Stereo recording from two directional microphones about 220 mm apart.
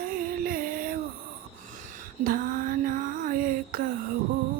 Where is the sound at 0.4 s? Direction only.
40° right (ahead or behind).